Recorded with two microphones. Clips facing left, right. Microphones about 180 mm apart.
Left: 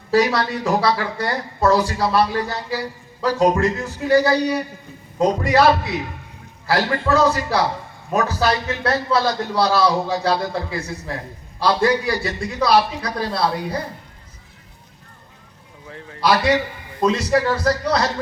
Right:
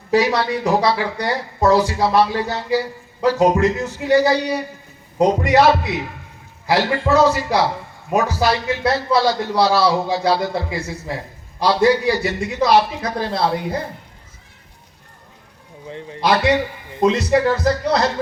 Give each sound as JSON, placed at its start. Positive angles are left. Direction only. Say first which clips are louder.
{"t": 0.1, "sound": "speech", "louder": "right 1 dB", "side_deg": -20}
{"t": 6.7, "sound": "a man's voice", "louder": "right 2 dB", "side_deg": -15}
{"t": 15.9, "sound": "speech", "louder": "right 1 dB", "side_deg": -20}